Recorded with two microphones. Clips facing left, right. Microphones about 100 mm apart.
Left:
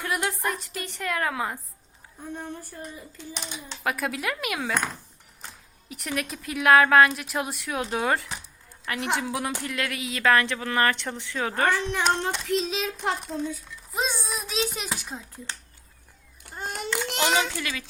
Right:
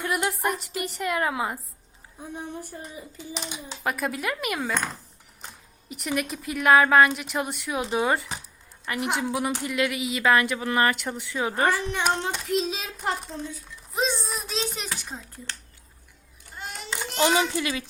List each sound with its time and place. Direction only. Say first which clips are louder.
0.0 s a woman's voice: right 2 dB; centre (ahead or behind)
3.2 s a woman's voice: right 3 dB; centre (ahead or behind)
5.9 s a woman's voice: right 3 dB; 5° right (ahead or behind)
11.8 s a woman's voice: left 1 dB; 5° right (ahead or behind)
13.9 s a sound: right 2 dB; 5° left (ahead or behind)
14.9 s a woman's voice: left 1 dB; centre (ahead or behind)
16.6 s a sound: left 5 dB; 50° left (ahead or behind)
17.2 s a child's voice: right 4 dB; 20° right (ahead or behind)